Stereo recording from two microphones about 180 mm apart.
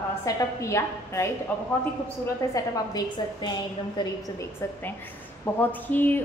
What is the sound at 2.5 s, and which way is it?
Speech, 20° left (ahead or behind).